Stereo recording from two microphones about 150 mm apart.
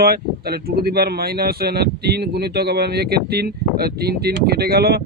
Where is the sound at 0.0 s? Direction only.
90° right.